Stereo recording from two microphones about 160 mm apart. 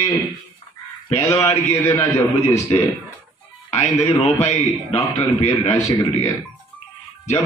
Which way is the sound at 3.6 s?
40° left (ahead or behind).